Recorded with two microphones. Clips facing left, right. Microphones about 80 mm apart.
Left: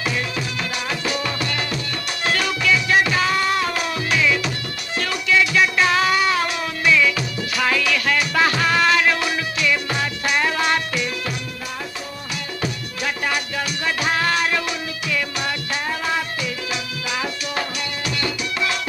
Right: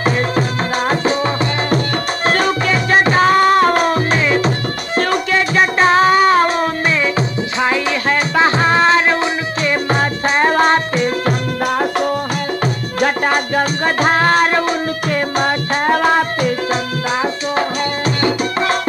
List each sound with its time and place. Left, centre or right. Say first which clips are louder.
0.0 s music: right 9 dB; right
11.6 s music: right 14 dB; right
12.6 s music: right 8 dB; right